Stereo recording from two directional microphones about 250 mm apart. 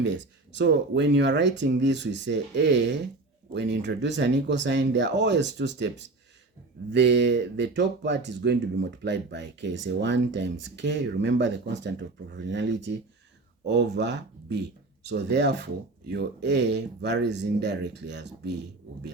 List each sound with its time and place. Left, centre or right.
0.5 s speech: right